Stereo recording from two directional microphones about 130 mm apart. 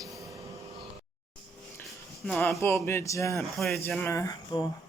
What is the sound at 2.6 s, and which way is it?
Speech, 20° left (ahead or behind).